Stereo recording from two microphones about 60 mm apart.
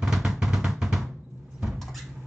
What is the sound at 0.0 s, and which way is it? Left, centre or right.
Drum, centre.